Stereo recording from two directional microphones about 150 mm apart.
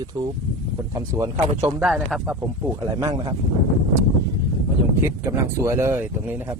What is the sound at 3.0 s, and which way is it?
Speech, 35° right (ahead or behind).